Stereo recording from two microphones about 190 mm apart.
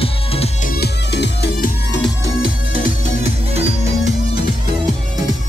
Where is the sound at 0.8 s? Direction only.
60° left (ahead or behind).